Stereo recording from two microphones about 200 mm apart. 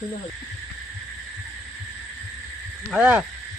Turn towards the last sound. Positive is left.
turn(degrees=-5)  # may be behind; listen again after turning